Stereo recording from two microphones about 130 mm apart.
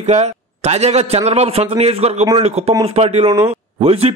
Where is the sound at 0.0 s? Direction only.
60° right (ahead or behind).